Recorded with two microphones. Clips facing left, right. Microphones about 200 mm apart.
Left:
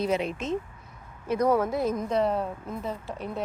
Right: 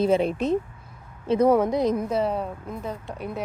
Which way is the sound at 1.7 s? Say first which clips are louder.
Right 4 dB; 15° right (ahead or behind).